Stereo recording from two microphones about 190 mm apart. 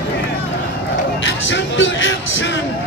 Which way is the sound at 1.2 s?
90° left.